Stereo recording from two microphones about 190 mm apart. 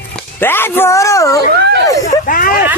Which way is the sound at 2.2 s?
45° left (ahead or behind).